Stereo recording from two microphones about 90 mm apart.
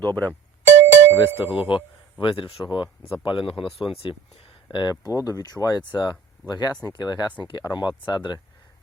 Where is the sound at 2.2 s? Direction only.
70° left (ahead or behind).